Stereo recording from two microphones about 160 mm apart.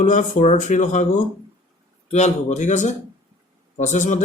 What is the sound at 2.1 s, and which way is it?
Speech, 45° left (ahead or behind).